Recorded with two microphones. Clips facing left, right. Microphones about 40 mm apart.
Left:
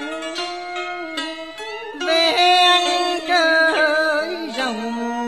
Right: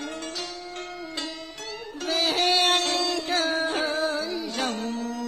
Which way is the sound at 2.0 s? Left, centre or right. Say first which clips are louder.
Left 9 dB; left.